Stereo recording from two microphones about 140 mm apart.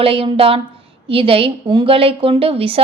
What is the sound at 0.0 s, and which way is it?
A woman's voice, 40° right (ahead or behind).